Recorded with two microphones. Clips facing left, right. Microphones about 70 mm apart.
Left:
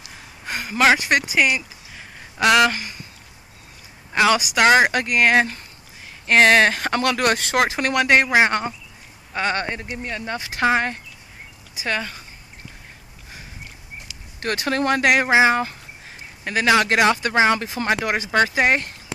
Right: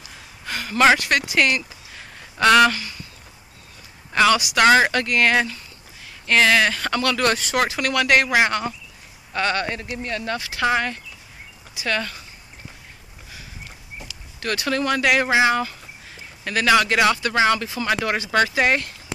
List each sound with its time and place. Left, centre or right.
0.5 s a sound: centre
0.9 s speech: centre
2.7 s speech: left
4.1 s speech: centre
6.2 s speech: left
11.8 s speech: left
14.4 s speech: left
16.4 s speech: left